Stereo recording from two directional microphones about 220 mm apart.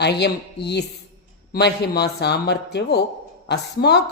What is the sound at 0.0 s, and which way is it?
A woman's voice, 50° left (ahead or behind).